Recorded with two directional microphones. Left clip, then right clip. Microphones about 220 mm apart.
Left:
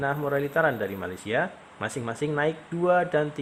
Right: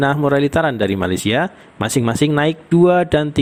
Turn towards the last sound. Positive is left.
turn(degrees=-40)  # may be behind; listen again after turning